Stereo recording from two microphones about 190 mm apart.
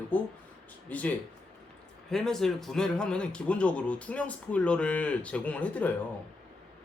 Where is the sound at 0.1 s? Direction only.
10° left (ahead or behind).